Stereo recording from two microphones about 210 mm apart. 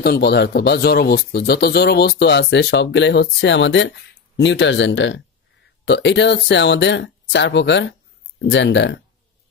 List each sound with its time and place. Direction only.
0.0 s speech: 50° left (ahead or behind)